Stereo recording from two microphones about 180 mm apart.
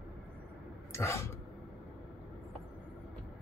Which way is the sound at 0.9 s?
15° left (ahead or behind).